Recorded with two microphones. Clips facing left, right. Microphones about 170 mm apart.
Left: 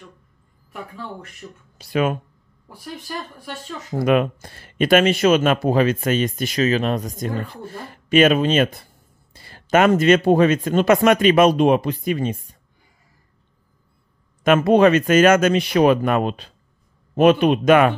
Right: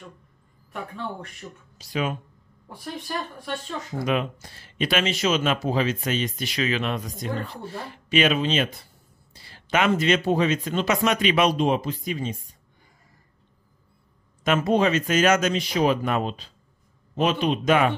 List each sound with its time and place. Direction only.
1.8 s speech: 55° left (ahead or behind)
4.0 s speech: 55° left (ahead or behind)
14.4 s speech: 60° left (ahead or behind)